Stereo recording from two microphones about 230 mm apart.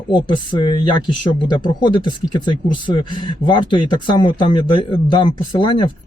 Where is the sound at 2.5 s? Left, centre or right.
Left.